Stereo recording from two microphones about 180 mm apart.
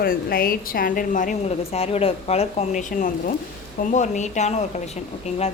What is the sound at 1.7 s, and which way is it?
A woman's voice, 35° left (ahead or behind).